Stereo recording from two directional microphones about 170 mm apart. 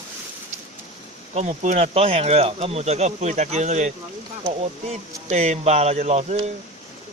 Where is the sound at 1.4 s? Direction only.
40° right (ahead or behind).